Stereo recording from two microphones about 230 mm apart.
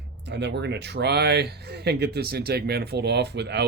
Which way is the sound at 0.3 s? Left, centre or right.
Right.